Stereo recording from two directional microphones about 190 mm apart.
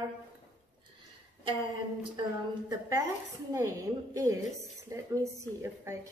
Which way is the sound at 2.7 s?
15° right (ahead or behind).